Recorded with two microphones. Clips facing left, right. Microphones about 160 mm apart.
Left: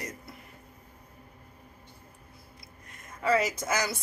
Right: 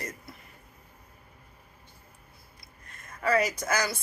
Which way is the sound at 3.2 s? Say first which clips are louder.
Even; 25° left (ahead or behind).